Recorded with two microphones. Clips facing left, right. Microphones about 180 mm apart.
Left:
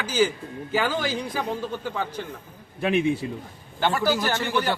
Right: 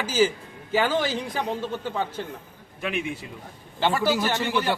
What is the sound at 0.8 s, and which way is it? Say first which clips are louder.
Speech: right 3 dB; centre (ahead or behind).